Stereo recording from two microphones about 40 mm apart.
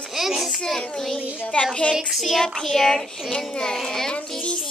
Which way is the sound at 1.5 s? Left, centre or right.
Left.